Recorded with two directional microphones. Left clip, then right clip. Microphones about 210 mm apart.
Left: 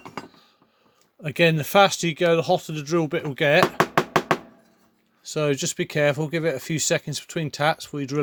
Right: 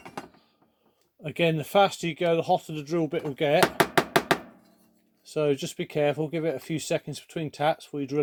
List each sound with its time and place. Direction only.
1.2 s speech: 40° left (ahead or behind)
5.2 s speech: 40° left (ahead or behind)